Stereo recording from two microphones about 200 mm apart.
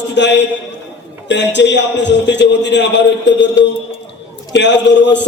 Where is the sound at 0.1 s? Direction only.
60° left (ahead or behind).